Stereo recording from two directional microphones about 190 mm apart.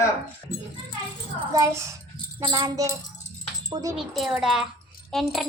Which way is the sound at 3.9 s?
Centre (ahead or behind).